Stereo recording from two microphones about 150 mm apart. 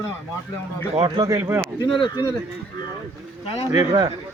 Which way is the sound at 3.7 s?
25° right (ahead or behind).